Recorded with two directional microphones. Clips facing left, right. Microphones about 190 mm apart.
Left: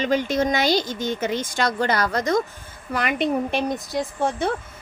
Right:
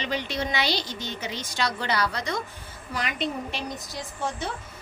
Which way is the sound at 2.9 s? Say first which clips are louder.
Left 8 dB; 55° left (ahead or behind).